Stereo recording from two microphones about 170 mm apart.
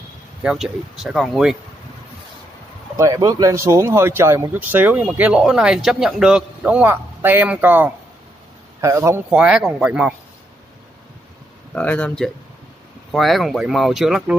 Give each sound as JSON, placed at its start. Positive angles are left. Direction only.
{"t": 0.4, "sound": "speech", "side_deg": -5}
{"t": 3.0, "sound": "speech", "side_deg": -20}
{"t": 11.7, "sound": "speech", "side_deg": 10}